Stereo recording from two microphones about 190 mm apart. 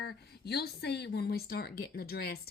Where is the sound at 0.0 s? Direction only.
55° left (ahead or behind).